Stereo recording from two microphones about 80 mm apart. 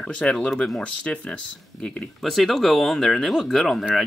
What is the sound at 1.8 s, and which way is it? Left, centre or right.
Speech, centre.